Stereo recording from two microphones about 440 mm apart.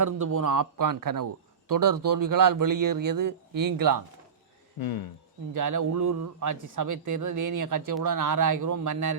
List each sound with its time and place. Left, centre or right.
0.0 s a man's voice: right
4.8 s speech: left
5.5 s a man's voice: right